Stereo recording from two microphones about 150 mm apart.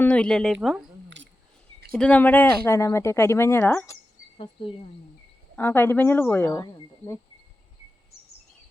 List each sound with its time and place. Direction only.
0.0 s speech: 5° left (ahead or behind)
1.9 s speech: 5° left (ahead or behind)
4.6 s speech: 35° left (ahead or behind)
5.5 s speech: 15° left (ahead or behind)